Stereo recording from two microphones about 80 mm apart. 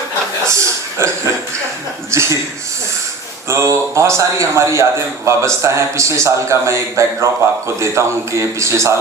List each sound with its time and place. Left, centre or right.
0.4 s a sound: right
2.0 s a man's voice: right
3.5 s a man's voice: right